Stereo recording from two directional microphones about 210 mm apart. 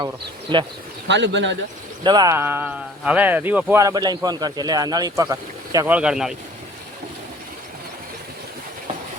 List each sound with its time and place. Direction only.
1.0 s speech: 55° right (ahead or behind)
2.0 s speech: 20° right (ahead or behind)